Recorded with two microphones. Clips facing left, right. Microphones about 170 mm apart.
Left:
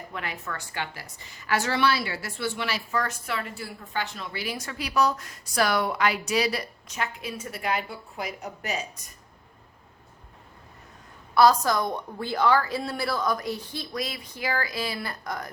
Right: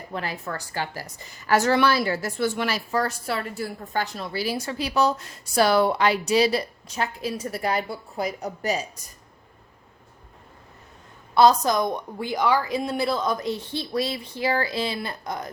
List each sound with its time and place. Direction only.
0.1 s a woman's voice: 35° right (ahead or behind)
11.3 s a woman's voice: 20° right (ahead or behind)